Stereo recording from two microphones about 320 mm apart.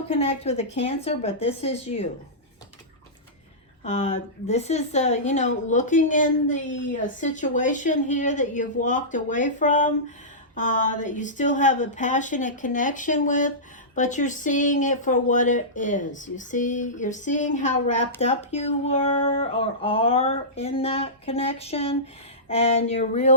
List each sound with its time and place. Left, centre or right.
0.1 s speech: centre
3.8 s speech: left